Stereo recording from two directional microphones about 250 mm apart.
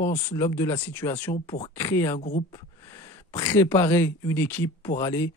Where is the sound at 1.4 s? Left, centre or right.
Left.